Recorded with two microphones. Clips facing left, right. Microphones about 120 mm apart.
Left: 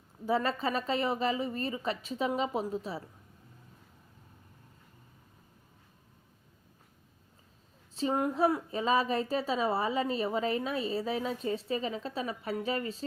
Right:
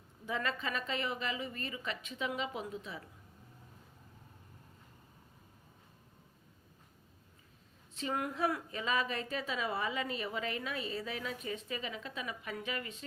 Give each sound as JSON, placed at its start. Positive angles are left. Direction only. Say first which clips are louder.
{"t": 0.3, "sound": "a woman's voice", "louder": "left 7 dB", "side_deg": 35}
{"t": 7.9, "sound": "a woman's voice", "louder": "left 7 dB", "side_deg": 30}